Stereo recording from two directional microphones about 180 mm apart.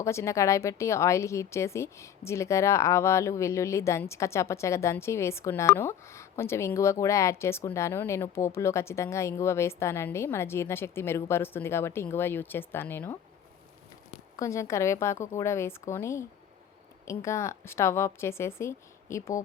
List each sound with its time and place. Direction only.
0.0 s a woman's voice: 15° left (ahead or behind)
14.3 s a woman's voice: 15° left (ahead or behind)